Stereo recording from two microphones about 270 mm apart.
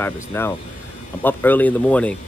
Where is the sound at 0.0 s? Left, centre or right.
Centre.